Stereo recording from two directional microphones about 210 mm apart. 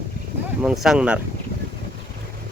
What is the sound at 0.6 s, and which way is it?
Speech, 5° right (ahead or behind).